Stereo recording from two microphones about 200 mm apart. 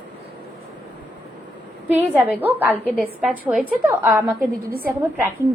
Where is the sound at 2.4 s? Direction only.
10° right (ahead or behind).